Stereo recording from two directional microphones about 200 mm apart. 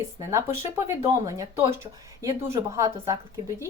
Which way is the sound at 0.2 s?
15° right (ahead or behind).